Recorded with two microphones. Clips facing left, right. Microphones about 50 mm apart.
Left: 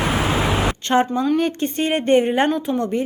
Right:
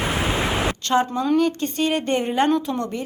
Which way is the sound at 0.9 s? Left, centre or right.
Left.